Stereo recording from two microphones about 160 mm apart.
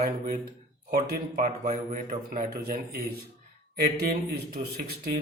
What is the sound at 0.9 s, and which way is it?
A man's voice, 65° right (ahead or behind).